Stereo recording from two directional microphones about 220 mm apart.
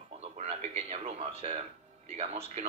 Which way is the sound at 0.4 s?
30° right (ahead or behind).